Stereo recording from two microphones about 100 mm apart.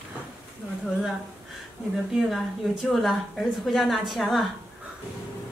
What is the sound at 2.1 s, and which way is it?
A woman's voice, centre (ahead or behind).